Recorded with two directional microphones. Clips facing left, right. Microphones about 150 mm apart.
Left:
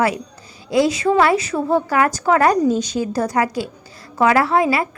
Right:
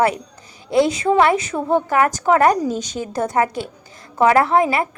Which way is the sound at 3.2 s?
25° right (ahead or behind).